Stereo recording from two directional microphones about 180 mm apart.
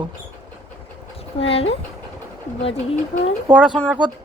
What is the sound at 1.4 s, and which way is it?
Speech, 35° left (ahead or behind).